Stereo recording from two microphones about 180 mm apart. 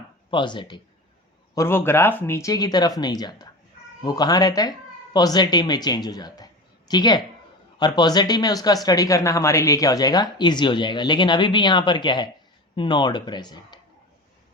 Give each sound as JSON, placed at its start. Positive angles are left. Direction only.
{"t": 0.3, "sound": "speech", "side_deg": 25}
{"t": 1.5, "sound": "speech", "side_deg": 15}